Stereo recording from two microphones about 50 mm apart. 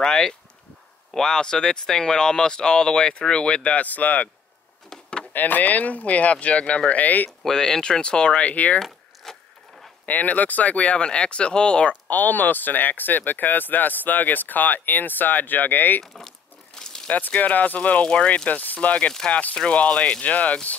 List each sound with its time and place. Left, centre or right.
0.0 s speech: centre; by 4.3 s left
4.8 s vehicle: centre
5.3 s speech: left
7.2 s speech: centre; by 8.7 s left
8.7 s a sound: centre
10.0 s speech: left
12.1 s speech: left
16.2 s crumpling: centre
17.1 s speech: left